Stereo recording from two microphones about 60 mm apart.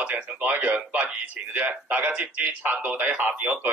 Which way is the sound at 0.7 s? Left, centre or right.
Right.